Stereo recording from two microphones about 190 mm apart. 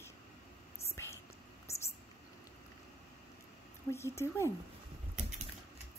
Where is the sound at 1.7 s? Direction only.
15° left (ahead or behind).